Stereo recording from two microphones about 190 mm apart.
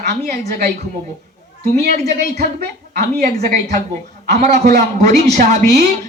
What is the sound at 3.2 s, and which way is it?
Speech, 40° right (ahead or behind).